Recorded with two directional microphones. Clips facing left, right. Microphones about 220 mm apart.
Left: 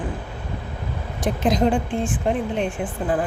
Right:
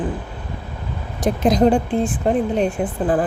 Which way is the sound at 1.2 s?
40° right (ahead or behind).